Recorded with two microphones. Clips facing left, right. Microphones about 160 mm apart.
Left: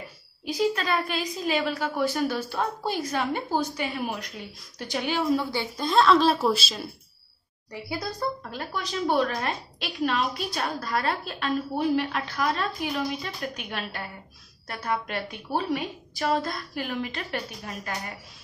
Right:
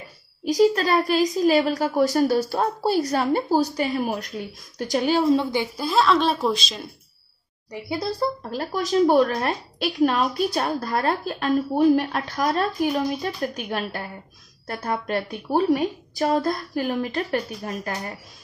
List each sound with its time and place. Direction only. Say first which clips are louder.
0.5 s a woman's voice: right 7 dB; 40° right (ahead or behind); by 5.9 s 15° right (ahead or behind)
5.9 s a woman's voice: left 1 dB; centre (ahead or behind)
7.7 s a woman's voice: right 5 dB; 25° right (ahead or behind); by 14.0 s 40° right (ahead or behind)
14.7 s a woman's voice: right 2 dB; 30° right (ahead or behind)
15.0 s a woman's voice: right 7 dB; 45° right (ahead or behind)